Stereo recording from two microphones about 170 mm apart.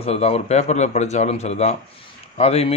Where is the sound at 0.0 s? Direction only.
35° left (ahead or behind).